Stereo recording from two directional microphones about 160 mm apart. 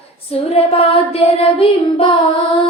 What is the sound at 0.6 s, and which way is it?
Child singing, 35° left (ahead or behind).